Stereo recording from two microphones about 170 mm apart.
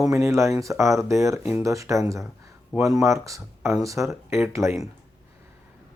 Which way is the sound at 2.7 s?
Centre (ahead or behind).